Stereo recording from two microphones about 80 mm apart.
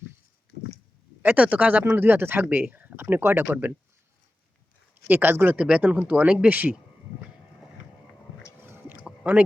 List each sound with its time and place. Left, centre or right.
1.2 s speech: centre
5.0 s speech: right
5.5 s speech: centre
8.6 s chewing: right
9.0 s chewing: centre